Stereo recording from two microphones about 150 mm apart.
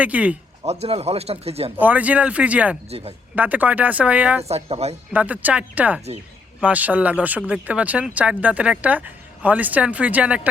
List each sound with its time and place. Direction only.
0.0 s speech: 10° right (ahead or behind)
0.6 s speech: 45° right (ahead or behind)
1.8 s speech: 10° right (ahead or behind)
2.9 s speech: 45° right (ahead or behind)
3.3 s speech: 10° right (ahead or behind)
4.4 s speech: 45° right (ahead or behind)
5.1 s speech: 10° right (ahead or behind)